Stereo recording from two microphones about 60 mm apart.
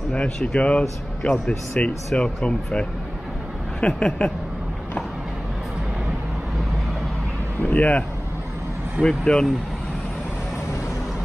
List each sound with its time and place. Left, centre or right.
0.6 s speech: centre
7.6 s speech: left
9.0 s speech: centre